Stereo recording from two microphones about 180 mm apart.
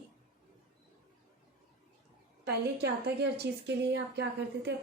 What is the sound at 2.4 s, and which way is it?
A woman's voice, 65° right (ahead or behind).